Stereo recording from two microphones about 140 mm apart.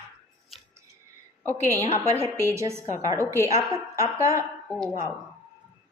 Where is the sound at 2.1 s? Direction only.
20° right (ahead or behind).